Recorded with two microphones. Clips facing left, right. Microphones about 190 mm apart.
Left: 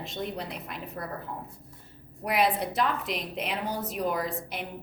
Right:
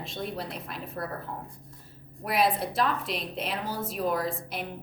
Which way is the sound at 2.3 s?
20° left (ahead or behind).